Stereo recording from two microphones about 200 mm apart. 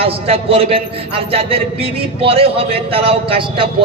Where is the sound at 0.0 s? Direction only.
30° right (ahead or behind).